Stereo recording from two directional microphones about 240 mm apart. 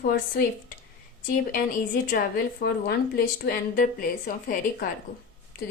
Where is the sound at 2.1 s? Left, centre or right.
Left.